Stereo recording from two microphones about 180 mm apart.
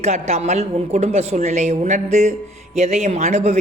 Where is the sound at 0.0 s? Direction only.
40° right (ahead or behind).